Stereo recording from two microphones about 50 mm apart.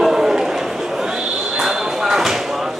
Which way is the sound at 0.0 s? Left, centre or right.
Centre.